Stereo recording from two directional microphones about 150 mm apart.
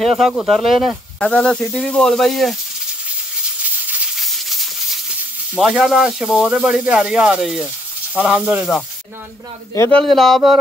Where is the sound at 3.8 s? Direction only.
Centre (ahead or behind).